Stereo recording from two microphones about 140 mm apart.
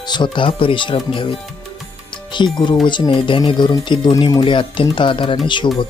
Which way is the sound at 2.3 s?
35° left (ahead or behind).